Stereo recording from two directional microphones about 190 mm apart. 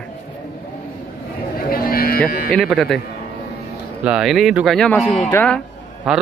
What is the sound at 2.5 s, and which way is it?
Speech, centre (ahead or behind).